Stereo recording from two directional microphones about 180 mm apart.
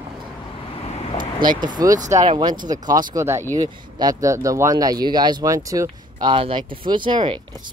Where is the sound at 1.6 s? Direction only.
25° right (ahead or behind).